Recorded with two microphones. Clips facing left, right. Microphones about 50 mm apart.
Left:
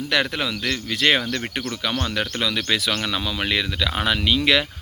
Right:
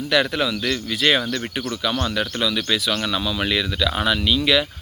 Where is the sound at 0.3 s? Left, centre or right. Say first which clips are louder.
Right 3 dB; left.